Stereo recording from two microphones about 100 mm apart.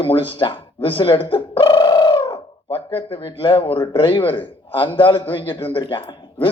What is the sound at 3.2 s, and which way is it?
A man's voice, 60° left (ahead or behind).